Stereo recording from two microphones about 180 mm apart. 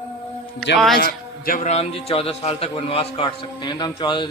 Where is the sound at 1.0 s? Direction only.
50° left (ahead or behind).